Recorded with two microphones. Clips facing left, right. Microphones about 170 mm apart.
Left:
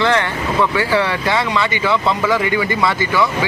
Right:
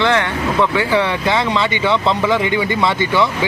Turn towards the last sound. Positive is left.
turn(degrees=-25)  # may be behind; listen again after turning